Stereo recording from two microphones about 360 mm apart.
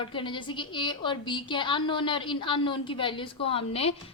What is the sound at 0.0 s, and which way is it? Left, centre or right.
A woman's voice, centre.